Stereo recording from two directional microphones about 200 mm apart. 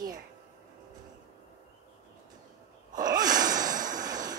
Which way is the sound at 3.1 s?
20° right (ahead or behind).